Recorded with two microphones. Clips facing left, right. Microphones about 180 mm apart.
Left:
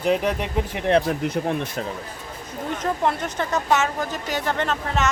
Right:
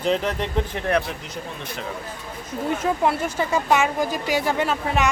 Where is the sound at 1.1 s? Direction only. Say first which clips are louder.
Left 10 dB; 60° left (ahead or behind).